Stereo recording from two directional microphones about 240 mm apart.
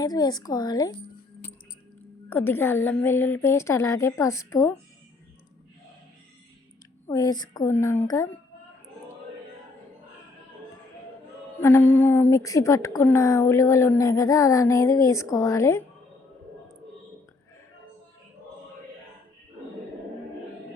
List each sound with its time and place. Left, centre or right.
0.0 s a woman's voice: centre
2.3 s a woman's voice: centre
7.1 s a woman's voice: centre
11.6 s a woman's voice: centre